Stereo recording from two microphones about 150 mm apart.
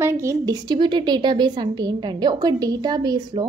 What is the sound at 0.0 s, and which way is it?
A woman's voice, 20° right (ahead or behind).